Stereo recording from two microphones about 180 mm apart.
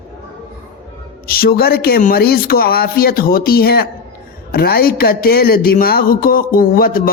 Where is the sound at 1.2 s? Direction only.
55° left (ahead or behind).